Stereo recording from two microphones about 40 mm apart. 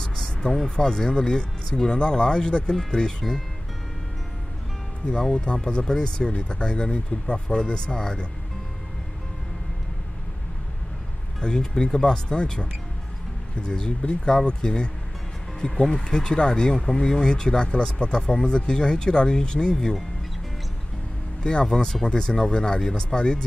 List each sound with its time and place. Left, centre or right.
0.0 s vehicle: centre
0.7 s speech: centre
5.3 s speech: left
11.4 s speech: centre
21.4 s speech: left